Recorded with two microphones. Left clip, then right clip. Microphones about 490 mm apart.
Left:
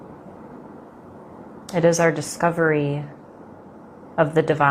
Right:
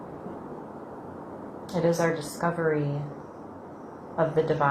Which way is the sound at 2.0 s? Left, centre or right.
Left.